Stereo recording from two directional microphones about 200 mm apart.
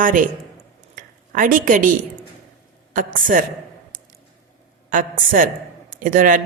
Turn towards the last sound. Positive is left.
turn(degrees=-40)  # may be behind; listen again after turning